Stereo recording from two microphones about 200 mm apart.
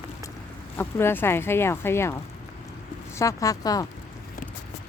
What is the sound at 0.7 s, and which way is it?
Speech, 10° left (ahead or behind).